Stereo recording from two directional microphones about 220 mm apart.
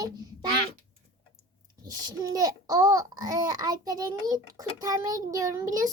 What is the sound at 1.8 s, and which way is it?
A child's voice, 15° right (ahead or behind).